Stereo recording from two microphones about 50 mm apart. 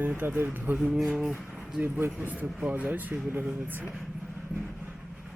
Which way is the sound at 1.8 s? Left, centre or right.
Right.